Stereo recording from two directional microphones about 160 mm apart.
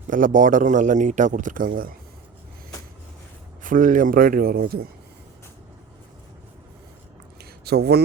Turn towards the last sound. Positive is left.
turn(degrees=-85)